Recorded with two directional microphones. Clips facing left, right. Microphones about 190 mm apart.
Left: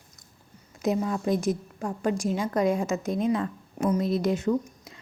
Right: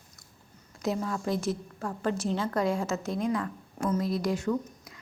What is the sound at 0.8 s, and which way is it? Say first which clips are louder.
A woman's voice: left 4 dB; 20° left (ahead or behind).